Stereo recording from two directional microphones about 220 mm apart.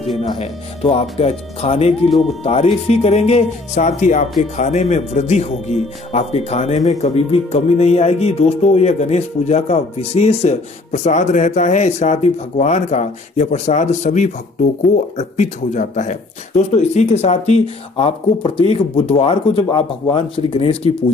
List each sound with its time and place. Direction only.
0.2 s speech: 30° left (ahead or behind)